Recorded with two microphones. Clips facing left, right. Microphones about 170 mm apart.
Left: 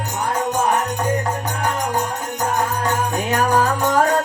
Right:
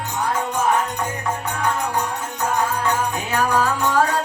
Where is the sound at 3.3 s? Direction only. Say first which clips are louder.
Left 2 dB; 45° left (ahead or behind).